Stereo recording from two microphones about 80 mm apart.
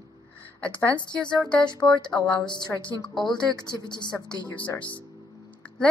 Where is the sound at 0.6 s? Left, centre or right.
Centre.